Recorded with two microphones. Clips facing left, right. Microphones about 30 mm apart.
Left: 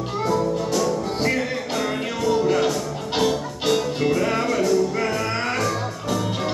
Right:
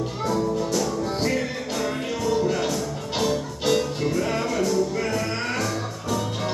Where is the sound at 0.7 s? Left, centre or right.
Centre.